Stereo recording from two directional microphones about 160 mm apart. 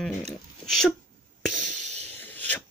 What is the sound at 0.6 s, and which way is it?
Speech, 5° left (ahead or behind).